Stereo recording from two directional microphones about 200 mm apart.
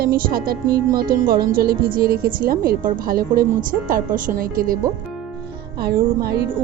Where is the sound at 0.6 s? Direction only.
20° right (ahead or behind).